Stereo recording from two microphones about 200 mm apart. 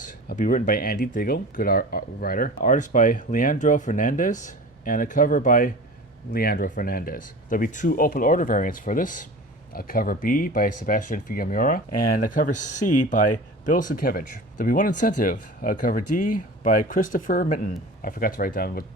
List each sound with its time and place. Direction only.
0.0 s speech: 40° left (ahead or behind)